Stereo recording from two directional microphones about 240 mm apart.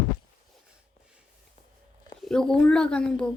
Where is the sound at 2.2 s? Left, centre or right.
Centre.